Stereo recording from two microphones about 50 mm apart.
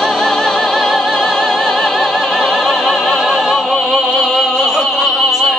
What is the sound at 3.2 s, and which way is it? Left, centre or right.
Opera, centre.